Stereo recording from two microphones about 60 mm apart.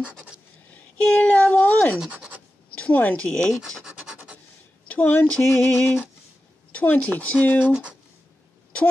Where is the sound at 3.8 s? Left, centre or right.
Centre.